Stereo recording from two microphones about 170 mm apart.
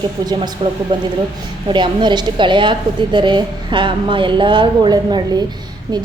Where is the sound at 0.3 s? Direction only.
25° right (ahead or behind).